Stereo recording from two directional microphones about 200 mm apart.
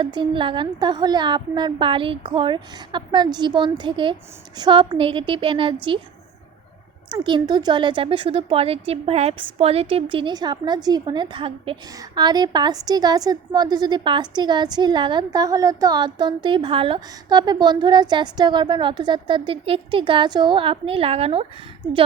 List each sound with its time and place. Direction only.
0.0 s a woman's voice: 25° right (ahead or behind)
7.1 s a woman's voice: 25° right (ahead or behind)